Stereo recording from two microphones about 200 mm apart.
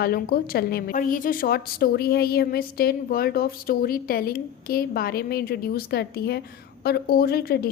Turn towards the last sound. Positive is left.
turn(degrees=50)  # may be behind; listen again after turning